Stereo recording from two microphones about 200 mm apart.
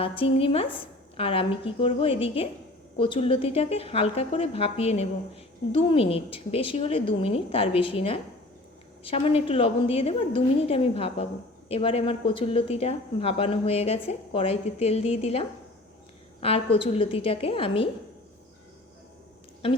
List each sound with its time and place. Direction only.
0.0 s speech: 25° left (ahead or behind)